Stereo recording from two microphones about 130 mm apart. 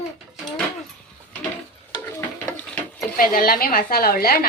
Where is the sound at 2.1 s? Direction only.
15° left (ahead or behind).